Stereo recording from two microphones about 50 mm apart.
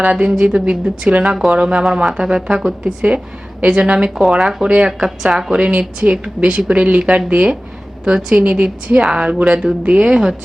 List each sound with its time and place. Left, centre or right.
0.1 s a woman's voice: right
2.8 s a woman's voice: right
4.1 s speech: centre
5.5 s a woman's voice: centre